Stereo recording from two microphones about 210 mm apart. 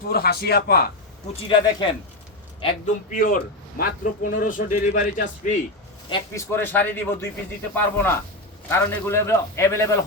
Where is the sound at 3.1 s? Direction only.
40° left (ahead or behind).